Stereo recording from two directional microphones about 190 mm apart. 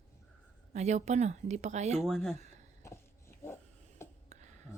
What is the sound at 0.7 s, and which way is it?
Speech, 35° right (ahead or behind).